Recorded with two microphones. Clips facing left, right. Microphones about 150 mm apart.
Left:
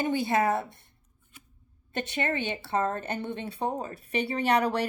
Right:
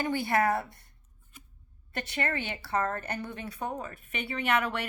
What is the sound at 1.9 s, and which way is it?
Speech, 20° left (ahead or behind).